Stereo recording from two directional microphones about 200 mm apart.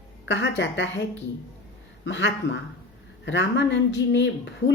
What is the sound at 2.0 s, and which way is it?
Speech, 65° left (ahead or behind).